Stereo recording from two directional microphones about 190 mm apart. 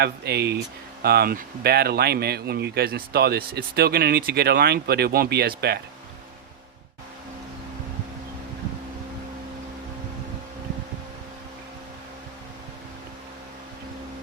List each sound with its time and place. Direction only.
0.0 s speech: 60° right (ahead or behind)